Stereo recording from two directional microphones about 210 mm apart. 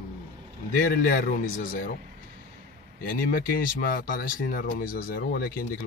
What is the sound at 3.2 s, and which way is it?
Speech, 45° left (ahead or behind).